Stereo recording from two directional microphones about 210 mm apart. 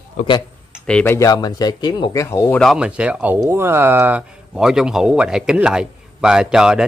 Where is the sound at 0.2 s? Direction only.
35° left (ahead or behind).